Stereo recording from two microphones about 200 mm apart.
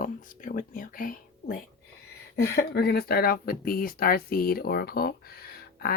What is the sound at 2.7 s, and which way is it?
Speech, 50° left (ahead or behind).